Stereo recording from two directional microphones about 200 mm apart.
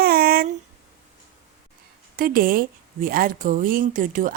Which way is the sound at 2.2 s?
45° right (ahead or behind).